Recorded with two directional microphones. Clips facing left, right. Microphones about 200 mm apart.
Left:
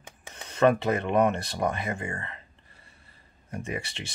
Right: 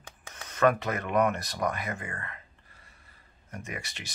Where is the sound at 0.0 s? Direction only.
25° left (ahead or behind).